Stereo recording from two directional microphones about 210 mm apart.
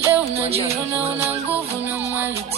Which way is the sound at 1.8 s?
10° right (ahead or behind).